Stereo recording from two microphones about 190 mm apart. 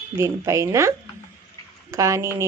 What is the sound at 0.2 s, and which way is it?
Speech, 15° right (ahead or behind).